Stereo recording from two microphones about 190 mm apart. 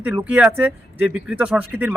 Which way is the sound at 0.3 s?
5° right (ahead or behind).